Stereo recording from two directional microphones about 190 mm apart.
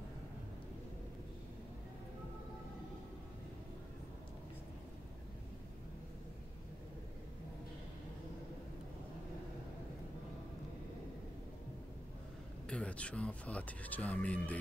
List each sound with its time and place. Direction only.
12.6 s speech: 5° left (ahead or behind)